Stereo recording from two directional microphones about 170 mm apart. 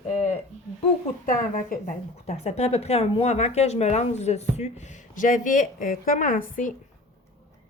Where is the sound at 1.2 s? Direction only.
50° left (ahead or behind).